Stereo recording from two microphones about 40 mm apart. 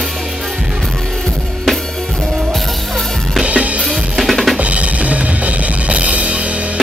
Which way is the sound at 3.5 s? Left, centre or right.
Right.